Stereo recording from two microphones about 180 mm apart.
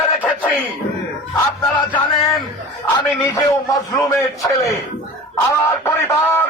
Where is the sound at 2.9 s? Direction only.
20° left (ahead or behind).